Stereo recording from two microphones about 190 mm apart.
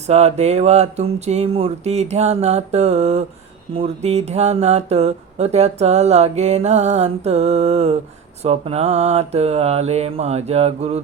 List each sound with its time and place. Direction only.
0.1 s speech: 35° right (ahead or behind)